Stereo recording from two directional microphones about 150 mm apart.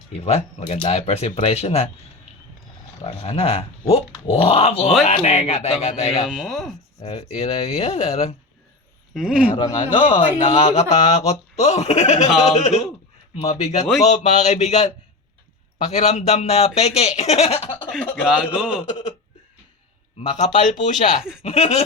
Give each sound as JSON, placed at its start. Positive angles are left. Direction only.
{"t": 0.1, "sound": "speech", "side_deg": 45}
{"t": 3.0, "sound": "speech", "side_deg": 40}
{"t": 6.2, "sound": "speech", "side_deg": 0}
{"t": 7.0, "sound": "speech", "side_deg": 40}
{"t": 9.1, "sound": "speech", "side_deg": -5}
{"t": 9.6, "sound": "speech", "side_deg": 30}
{"t": 15.9, "sound": "speech", "side_deg": 50}
{"t": 17.8, "sound": "speech", "side_deg": 5}
{"t": 20.4, "sound": "speech", "side_deg": 50}